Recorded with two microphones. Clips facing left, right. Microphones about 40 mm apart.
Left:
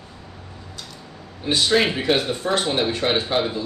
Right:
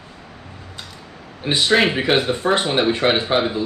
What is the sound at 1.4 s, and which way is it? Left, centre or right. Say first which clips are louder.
A man's voice: right 2 dB; right.